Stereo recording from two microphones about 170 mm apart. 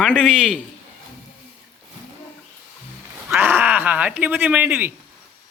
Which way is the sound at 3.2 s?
10° right (ahead or behind).